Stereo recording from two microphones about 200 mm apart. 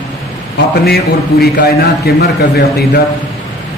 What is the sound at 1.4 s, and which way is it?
A man's voice, 50° left (ahead or behind).